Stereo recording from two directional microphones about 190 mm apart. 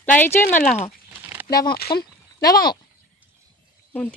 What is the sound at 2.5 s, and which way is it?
Speech, 20° left (ahead or behind).